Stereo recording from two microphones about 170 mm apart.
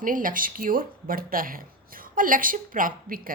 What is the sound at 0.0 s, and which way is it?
A woman's voice, 55° right (ahead or behind).